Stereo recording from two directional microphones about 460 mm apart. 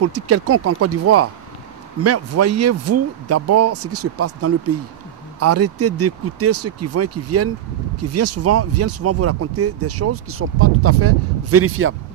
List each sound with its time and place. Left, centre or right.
0.0 s speech: right